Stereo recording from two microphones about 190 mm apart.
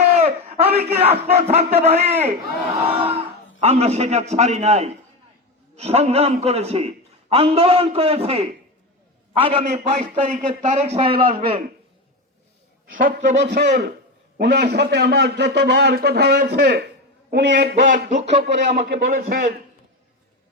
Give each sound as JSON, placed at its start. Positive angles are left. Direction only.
{"t": 0.3, "sound": "a sound", "side_deg": -30}
{"t": 0.9, "sound": "a man's voice", "side_deg": -35}
{"t": 9.6, "sound": "a man's voice", "side_deg": -40}
{"t": 11.1, "sound": "a man's voice", "side_deg": -50}
{"t": 12.9, "sound": "a man's voice", "side_deg": -45}
{"t": 13.3, "sound": "a man's voice", "side_deg": -65}
{"t": 17.8, "sound": "a man's voice", "side_deg": -45}
{"t": 18.4, "sound": "a man's voice", "side_deg": -65}
{"t": 18.8, "sound": "a man's voice", "side_deg": -50}